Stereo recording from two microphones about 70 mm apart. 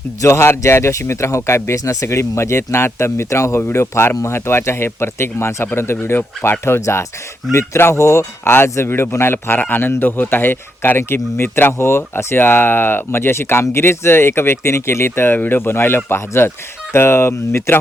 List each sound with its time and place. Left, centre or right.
0.2 s a man's voice: left